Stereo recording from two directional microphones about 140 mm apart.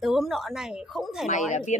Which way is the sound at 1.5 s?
60° left (ahead or behind).